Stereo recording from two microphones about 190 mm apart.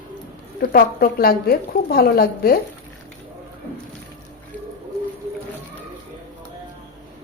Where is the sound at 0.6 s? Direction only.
50° left (ahead or behind).